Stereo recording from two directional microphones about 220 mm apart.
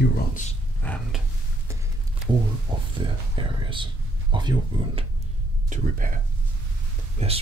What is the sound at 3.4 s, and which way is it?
A man's voice, 25° right (ahead or behind).